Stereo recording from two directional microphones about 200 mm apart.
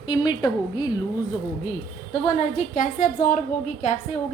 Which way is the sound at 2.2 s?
40° left (ahead or behind).